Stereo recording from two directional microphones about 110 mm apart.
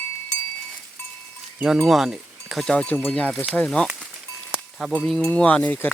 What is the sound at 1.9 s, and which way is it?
Speech, centre (ahead or behind).